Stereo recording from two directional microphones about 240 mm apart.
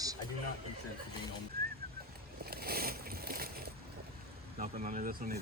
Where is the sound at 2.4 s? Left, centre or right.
Right.